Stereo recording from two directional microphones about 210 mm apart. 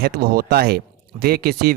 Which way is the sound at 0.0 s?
45° right (ahead or behind).